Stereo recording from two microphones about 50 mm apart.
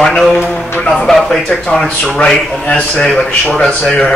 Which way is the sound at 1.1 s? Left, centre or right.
Centre.